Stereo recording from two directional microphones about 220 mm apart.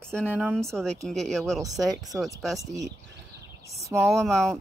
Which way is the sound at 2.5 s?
15° right (ahead or behind).